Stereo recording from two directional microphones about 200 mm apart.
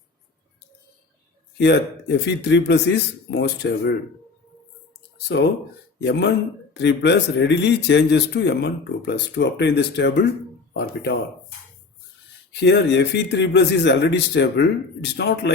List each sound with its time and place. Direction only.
1.5 s speech: 60° left (ahead or behind)
5.3 s speech: 55° left (ahead or behind)
12.5 s speech: 60° left (ahead or behind)